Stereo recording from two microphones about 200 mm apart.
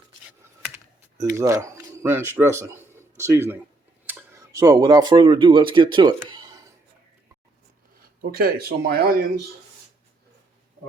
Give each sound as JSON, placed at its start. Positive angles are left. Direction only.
{"t": 1.2, "sound": "speech", "side_deg": -15}
{"t": 8.2, "sound": "speech", "side_deg": -50}